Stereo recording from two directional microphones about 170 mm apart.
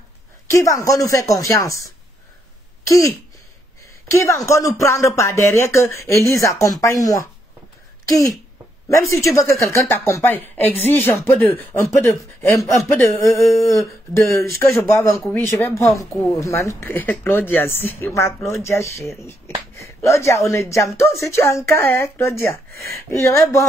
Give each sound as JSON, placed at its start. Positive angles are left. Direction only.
{"t": 0.5, "sound": "a woman's voice", "side_deg": 20}
{"t": 2.9, "sound": "a woman's voice", "side_deg": 20}
{"t": 8.8, "sound": "a woman's voice", "side_deg": 15}
{"t": 16.3, "sound": "speech", "side_deg": 15}